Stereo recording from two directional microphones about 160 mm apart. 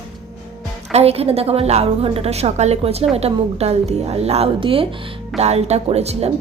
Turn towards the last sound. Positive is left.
turn(degrees=-40)  # may be behind; listen again after turning